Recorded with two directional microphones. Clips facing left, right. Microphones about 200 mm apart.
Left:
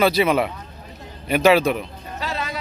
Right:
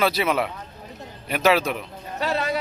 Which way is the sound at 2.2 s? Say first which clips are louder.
Right 4 dB; 60° right (ahead or behind).